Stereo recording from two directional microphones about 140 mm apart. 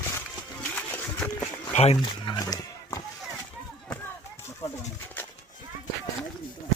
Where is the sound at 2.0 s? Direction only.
35° left (ahead or behind).